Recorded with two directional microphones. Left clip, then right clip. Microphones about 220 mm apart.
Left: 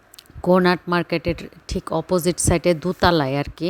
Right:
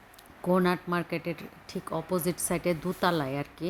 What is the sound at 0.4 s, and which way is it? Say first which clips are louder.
A woman's voice: left 9 dB; 40° left (ahead or behind).